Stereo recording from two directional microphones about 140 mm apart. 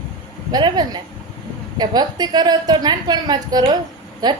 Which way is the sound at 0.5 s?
30° right (ahead or behind).